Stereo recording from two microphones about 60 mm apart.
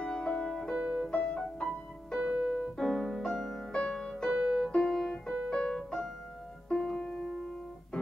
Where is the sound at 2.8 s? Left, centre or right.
Centre.